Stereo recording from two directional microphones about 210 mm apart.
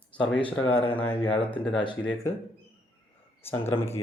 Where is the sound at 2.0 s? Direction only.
10° left (ahead or behind).